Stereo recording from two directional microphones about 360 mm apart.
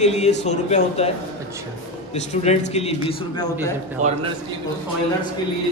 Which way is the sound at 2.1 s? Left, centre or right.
Centre.